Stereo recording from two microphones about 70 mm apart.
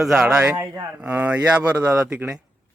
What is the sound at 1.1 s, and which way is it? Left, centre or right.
Speech, right.